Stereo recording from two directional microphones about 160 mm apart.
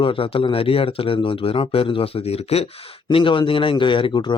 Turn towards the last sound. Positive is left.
turn(degrees=30)  # may be behind; listen again after turning